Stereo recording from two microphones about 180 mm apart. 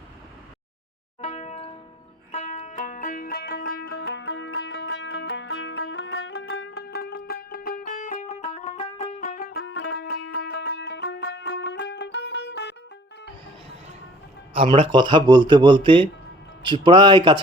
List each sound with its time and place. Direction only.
1.2 s a sound: 40° left (ahead or behind)
2.3 s music: 40° left (ahead or behind); by 12.6 s 75° left (ahead or behind)
14.5 s speech: 30° right (ahead or behind)